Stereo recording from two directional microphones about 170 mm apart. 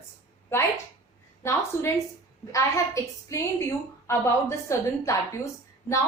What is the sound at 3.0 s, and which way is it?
A woman's voice, 20° left (ahead or behind).